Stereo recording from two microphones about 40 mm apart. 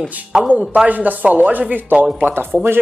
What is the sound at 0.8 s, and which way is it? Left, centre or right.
Speech, right.